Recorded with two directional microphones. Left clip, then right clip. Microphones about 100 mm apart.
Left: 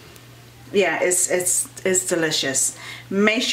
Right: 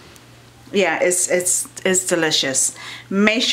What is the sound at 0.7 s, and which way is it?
Speech, 35° right (ahead or behind).